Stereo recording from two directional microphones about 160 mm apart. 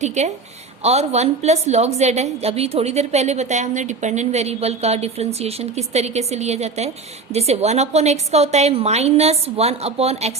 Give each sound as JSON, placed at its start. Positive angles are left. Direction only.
{"t": 0.0, "sound": "a woman's voice", "side_deg": -45}